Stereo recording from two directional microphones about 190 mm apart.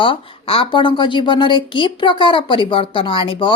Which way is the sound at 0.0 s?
30° left (ahead or behind).